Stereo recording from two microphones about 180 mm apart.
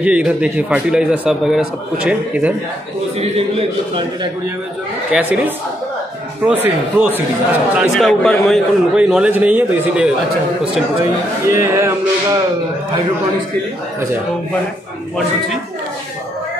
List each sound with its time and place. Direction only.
0.0 s a man's voice: 5° right (ahead or behind)
3.2 s a man's voice: 35° right (ahead or behind)
5.1 s a man's voice: 5° right (ahead or behind)
7.7 s a man's voice: centre (ahead or behind)
11.5 s a man's voice: 15° right (ahead or behind)